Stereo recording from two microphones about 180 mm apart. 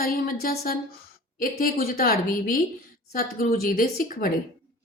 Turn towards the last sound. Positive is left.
turn(degrees=50)  # may be behind; listen again after turning